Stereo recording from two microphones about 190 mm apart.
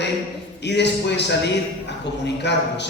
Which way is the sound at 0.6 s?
65° left (ahead or behind).